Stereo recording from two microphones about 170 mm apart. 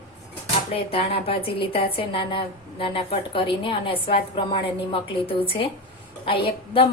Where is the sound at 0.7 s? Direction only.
35° left (ahead or behind).